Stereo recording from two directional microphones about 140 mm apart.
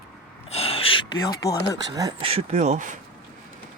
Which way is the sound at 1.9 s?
30° right (ahead or behind).